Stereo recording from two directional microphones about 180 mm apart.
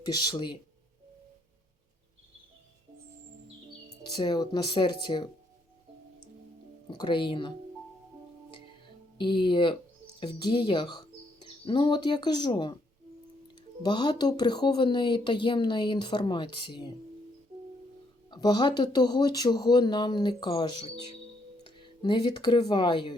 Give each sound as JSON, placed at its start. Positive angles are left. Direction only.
{"t": 0.0, "sound": "speech", "side_deg": 20}
{"t": 4.1, "sound": "speech", "side_deg": 20}
{"t": 6.9, "sound": "speech", "side_deg": 25}
{"t": 9.1, "sound": "speech", "side_deg": 25}
{"t": 13.8, "sound": "speech", "side_deg": 25}
{"t": 18.3, "sound": "speech", "side_deg": 25}
{"t": 22.0, "sound": "speech", "side_deg": 25}